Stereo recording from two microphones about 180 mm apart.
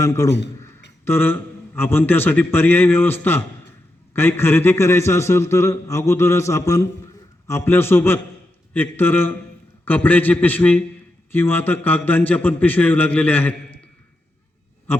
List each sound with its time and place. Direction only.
0.0 s a man's voice: 15° left (ahead or behind)
14.9 s a man's voice: 10° left (ahead or behind)